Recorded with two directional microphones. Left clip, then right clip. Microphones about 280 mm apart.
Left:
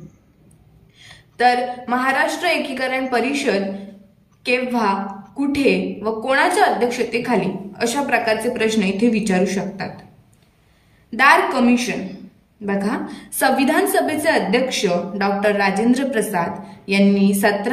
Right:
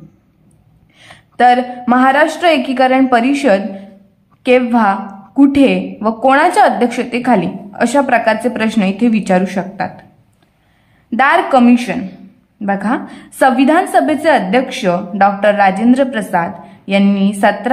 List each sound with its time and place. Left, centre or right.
0.9 s a woman's voice: centre
11.1 s a woman's voice: centre